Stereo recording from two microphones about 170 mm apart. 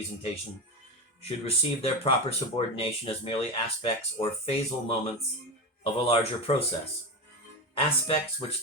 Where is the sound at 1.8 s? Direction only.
35° left (ahead or behind).